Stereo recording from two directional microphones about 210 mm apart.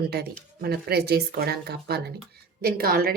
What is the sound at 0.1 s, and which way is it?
A woman's voice, 50° right (ahead or behind).